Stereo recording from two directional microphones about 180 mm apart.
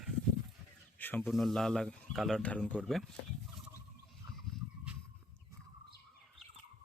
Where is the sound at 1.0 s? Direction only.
10° left (ahead or behind).